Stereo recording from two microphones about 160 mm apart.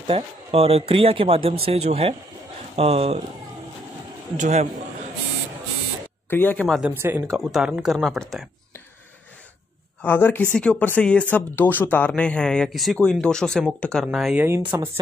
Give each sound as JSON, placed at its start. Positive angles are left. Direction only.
{"t": 0.0, "sound": "speech", "side_deg": -35}
{"t": 4.4, "sound": "a man's voice", "side_deg": -45}
{"t": 6.3, "sound": "speech", "side_deg": 10}
{"t": 6.8, "sound": "speech", "side_deg": -15}
{"t": 7.2, "sound": "speech", "side_deg": 0}
{"t": 10.0, "sound": "speech", "side_deg": 10}
{"t": 14.7, "sound": "speech", "side_deg": -15}